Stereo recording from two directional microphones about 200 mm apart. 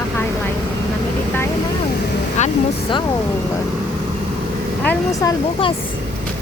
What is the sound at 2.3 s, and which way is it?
Speech, 35° left (ahead or behind).